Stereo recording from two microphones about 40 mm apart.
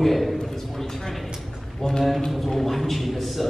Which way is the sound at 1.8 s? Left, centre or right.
Centre.